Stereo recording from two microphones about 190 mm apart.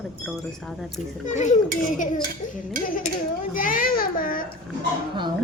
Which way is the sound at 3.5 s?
45° left (ahead or behind).